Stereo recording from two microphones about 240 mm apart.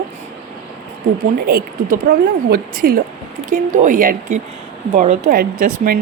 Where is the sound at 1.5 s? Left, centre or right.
Right.